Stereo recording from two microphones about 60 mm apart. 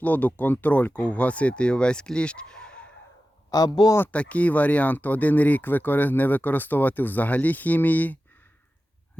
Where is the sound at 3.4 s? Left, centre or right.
Left.